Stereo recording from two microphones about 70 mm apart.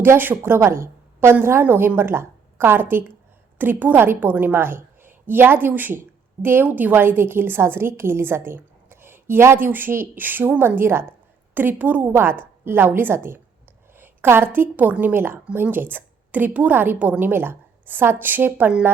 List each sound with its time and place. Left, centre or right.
0.0 s a woman's voice: right
0.6 s a woman's voice: right
12.1 s a woman's voice: right